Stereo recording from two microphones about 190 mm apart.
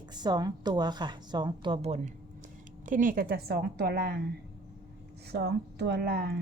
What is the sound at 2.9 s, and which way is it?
A woman's voice, 45° right (ahead or behind).